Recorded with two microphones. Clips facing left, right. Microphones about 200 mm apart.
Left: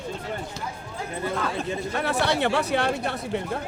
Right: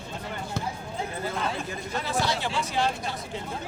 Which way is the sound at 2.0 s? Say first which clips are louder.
Left 4 dB; 60° left (ahead or behind).